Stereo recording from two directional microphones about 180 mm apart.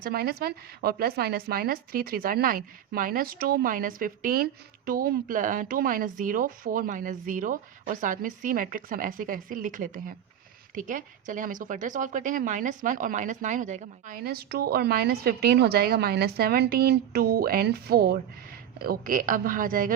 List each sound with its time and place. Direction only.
0.0 s speech: 60° right (ahead or behind)